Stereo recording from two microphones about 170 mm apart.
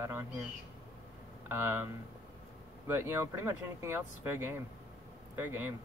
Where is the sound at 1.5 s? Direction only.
15° right (ahead or behind).